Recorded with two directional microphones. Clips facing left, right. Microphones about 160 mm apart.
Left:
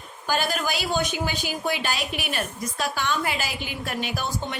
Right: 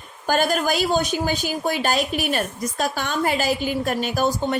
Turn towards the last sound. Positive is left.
turn(degrees=-45)  # may be behind; listen again after turning